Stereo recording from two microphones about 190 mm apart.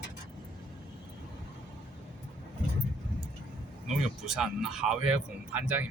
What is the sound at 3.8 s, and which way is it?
Speech, 5° right (ahead or behind).